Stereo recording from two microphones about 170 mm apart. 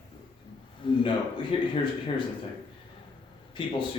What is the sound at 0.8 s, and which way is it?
Speech, 30° left (ahead or behind).